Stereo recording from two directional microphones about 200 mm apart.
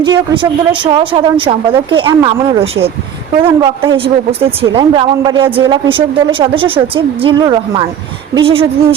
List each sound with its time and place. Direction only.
0.0 s a man's voice: 20° right (ahead or behind)